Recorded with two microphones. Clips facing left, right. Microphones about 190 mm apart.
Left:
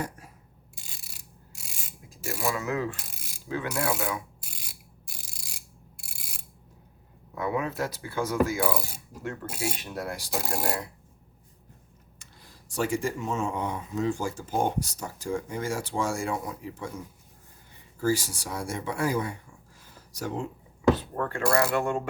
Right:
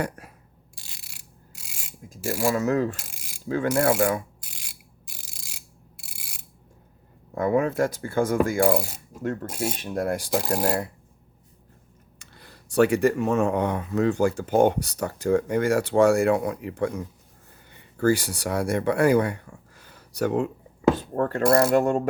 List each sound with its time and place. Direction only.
0.2 s mechanisms: 65° right (ahead or behind)
2.0 s speech: 45° right (ahead or behind)
7.3 s speech: 45° right (ahead or behind)
12.2 s speech: 65° right (ahead or behind)
20.9 s cutlery: 45° right (ahead or behind)
21.5 s speech: 40° right (ahead or behind)